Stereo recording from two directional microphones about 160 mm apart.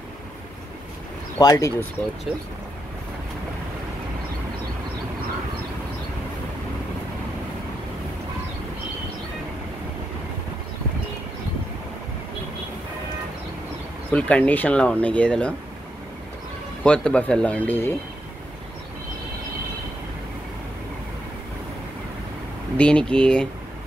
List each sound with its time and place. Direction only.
1.4 s speech: 20° left (ahead or behind)
2.3 s speech: 5° right (ahead or behind)
14.1 s speech: 10° left (ahead or behind)
16.8 s speech: 5° left (ahead or behind)
22.8 s speech: 5° left (ahead or behind)